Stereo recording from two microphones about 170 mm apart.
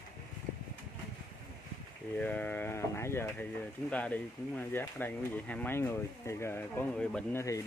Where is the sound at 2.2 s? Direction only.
10° left (ahead or behind).